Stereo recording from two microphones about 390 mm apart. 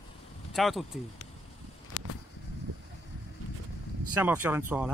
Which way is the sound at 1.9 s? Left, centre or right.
Left.